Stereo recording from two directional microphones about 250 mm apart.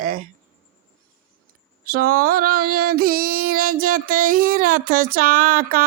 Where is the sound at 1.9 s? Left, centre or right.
Right.